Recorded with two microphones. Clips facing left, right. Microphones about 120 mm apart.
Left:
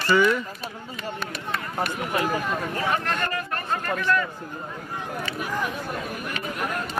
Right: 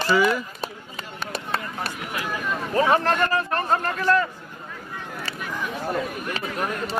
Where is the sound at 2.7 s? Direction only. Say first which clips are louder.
Right 11 dB; 35° right (ahead or behind).